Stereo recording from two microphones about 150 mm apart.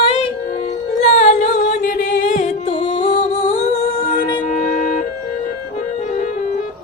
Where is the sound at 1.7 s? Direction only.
60° left (ahead or behind).